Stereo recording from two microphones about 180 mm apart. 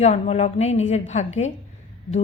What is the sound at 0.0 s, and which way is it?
A woman's voice, 35° left (ahead or behind).